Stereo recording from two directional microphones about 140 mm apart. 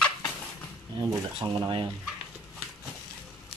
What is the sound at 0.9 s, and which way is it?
Speech, 30° right (ahead or behind).